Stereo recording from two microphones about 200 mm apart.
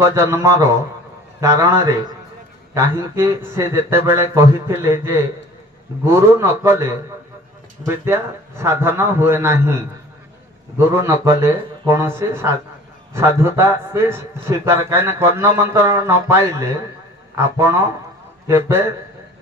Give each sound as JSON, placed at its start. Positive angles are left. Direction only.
{"t": 0.0, "sound": "a man's voice", "side_deg": -15}
{"t": 2.7, "sound": "a man's voice", "side_deg": -15}